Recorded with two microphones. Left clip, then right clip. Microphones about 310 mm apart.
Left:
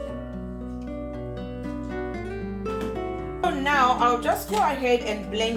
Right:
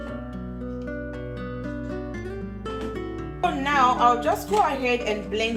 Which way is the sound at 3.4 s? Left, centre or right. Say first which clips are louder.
Even; centre.